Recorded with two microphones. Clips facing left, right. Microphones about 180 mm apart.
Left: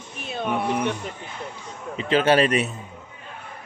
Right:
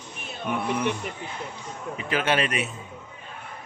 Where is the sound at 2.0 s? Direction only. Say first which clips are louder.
Left 7 dB; 30° left (ahead or behind).